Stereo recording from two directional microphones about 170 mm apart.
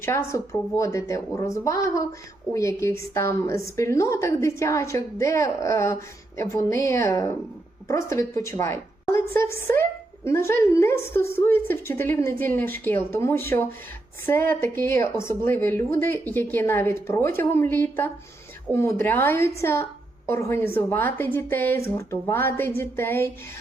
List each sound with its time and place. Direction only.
0.0 s a woman's voice: 15° left (ahead or behind)